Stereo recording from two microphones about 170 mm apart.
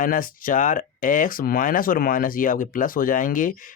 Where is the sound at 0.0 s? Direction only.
55° left (ahead or behind).